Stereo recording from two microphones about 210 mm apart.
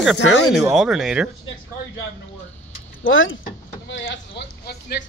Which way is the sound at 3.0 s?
65° left (ahead or behind).